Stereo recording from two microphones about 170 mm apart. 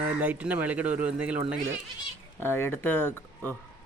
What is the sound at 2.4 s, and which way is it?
Speech, 15° left (ahead or behind).